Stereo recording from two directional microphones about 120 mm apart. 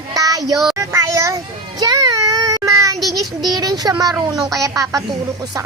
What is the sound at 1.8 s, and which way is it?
Child singing, 35° right (ahead or behind).